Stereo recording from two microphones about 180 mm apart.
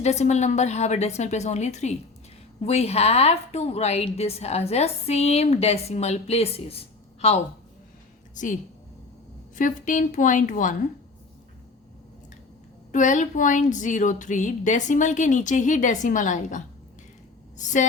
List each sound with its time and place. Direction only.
0.0 s a woman's voice: 40° left (ahead or behind)
9.6 s speech: 45° left (ahead or behind)
12.9 s speech: 45° left (ahead or behind)